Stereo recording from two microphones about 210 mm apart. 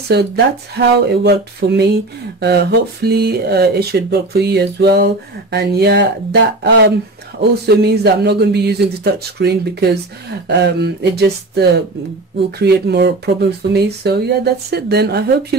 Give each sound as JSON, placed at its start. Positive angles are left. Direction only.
{"t": 0.1, "sound": "speech", "side_deg": -50}